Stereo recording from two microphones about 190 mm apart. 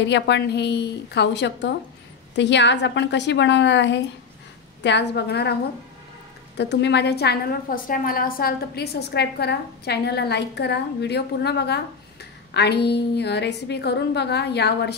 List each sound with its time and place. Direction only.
0.0 s a woman's voice: 65° left (ahead or behind)